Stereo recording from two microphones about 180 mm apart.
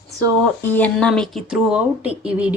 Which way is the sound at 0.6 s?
10° left (ahead or behind).